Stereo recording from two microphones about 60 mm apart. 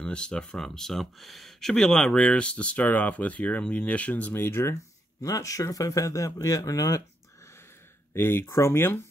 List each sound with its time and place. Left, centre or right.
0.0 s speech: centre; by 4.7 s left
5.2 s speech: left
8.1 s speech: left